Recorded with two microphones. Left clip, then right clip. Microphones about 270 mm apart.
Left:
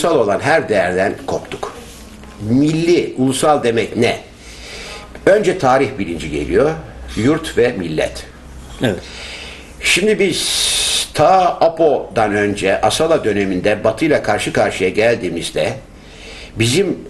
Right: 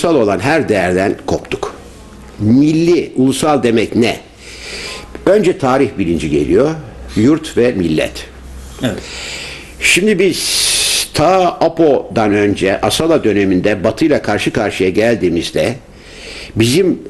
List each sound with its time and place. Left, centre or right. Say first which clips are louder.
0.0 s speech: right 2 dB; right
9.0 s speech: right 5 dB; right
16.2 s a sound: right 4 dB; right